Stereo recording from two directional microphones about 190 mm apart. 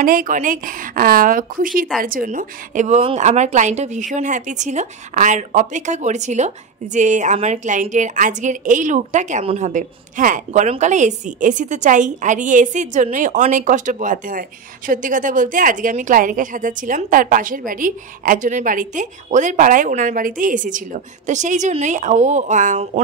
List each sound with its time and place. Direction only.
0.0 s a woman's voice: 50° right (ahead or behind)